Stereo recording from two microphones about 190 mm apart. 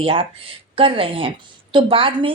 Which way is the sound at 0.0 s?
30° right (ahead or behind).